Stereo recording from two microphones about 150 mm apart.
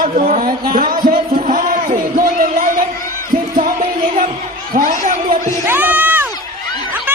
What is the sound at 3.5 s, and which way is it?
Music, 65° right (ahead or behind).